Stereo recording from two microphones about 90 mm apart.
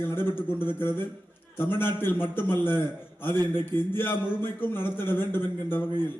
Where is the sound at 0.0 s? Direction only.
25° left (ahead or behind).